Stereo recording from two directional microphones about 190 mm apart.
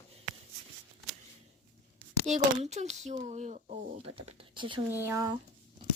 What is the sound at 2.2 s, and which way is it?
Speech, 35° right (ahead or behind).